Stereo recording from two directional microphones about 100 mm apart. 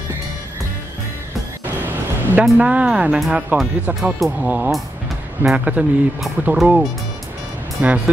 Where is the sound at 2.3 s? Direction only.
15° right (ahead or behind).